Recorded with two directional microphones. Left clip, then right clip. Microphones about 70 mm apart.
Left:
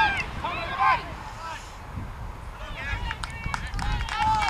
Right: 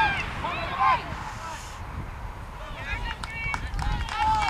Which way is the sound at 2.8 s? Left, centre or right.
Centre.